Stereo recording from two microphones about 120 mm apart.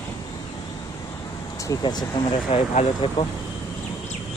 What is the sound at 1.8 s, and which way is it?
Speech, 35° left (ahead or behind).